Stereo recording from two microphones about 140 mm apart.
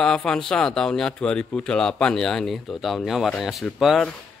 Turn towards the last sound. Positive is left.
turn(degrees=0)  # may be behind; listen again after turning